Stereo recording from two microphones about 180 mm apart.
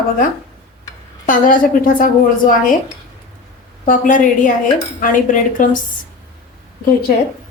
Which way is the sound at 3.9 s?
45° left (ahead or behind).